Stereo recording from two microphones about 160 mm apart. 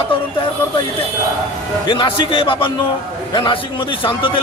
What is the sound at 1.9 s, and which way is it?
A man's voice, 30° left (ahead or behind).